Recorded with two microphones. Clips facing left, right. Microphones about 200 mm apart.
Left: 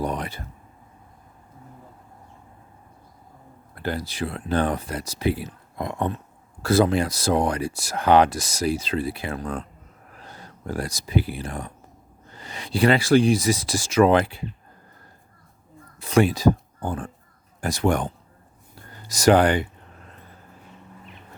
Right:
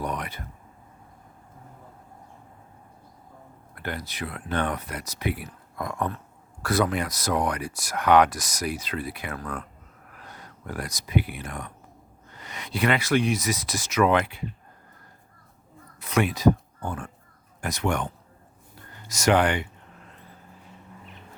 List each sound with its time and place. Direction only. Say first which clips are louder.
0.0 s a sound: left 4 dB; 30° left (ahead or behind)
3.8 s speech: left 6 dB; 30° left (ahead or behind)
16.0 s speech: left 5 dB; 30° left (ahead or behind)